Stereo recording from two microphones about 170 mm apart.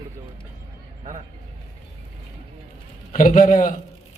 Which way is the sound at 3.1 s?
50° left (ahead or behind).